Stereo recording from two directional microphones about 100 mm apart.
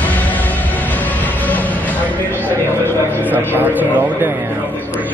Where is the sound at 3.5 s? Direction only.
20° right (ahead or behind).